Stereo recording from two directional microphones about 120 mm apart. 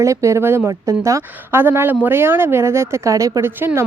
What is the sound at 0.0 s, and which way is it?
A woman's voice, 25° right (ahead or behind).